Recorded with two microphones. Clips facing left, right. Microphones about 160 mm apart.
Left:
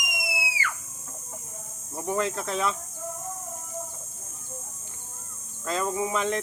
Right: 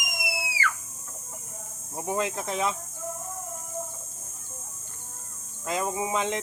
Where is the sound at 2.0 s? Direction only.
20° right (ahead or behind).